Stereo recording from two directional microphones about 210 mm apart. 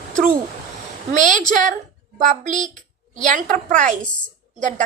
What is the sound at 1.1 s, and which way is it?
Speech, 35° right (ahead or behind).